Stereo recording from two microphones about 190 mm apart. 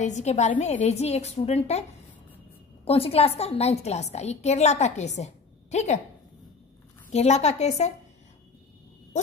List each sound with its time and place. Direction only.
0.0 s a woman's voice: 35° left (ahead or behind)
7.1 s a woman's voice: 35° left (ahead or behind)